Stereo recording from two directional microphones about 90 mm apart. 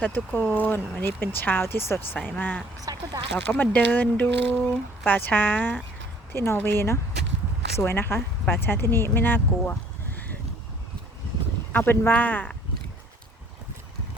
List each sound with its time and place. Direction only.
0.0 s speech: 20° left (ahead or behind)
2.8 s a sound: 45° right (ahead or behind)
3.3 s speech: 20° left (ahead or behind)
11.7 s speech: 25° left (ahead or behind)